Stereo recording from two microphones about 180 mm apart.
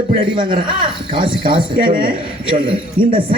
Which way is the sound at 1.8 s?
55° right (ahead or behind).